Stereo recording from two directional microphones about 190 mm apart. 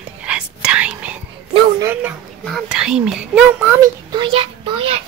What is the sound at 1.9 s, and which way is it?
A child's voice, 10° right (ahead or behind).